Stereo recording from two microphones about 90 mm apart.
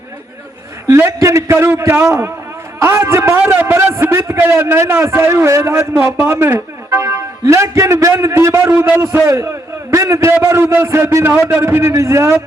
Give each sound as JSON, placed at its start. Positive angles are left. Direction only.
{"t": 0.9, "sound": "a man's voice", "side_deg": -30}
{"t": 7.0, "sound": "a man's voice", "side_deg": -35}